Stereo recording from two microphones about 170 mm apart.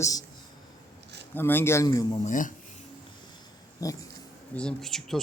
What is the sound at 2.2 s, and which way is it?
Speech, 50° left (ahead or behind).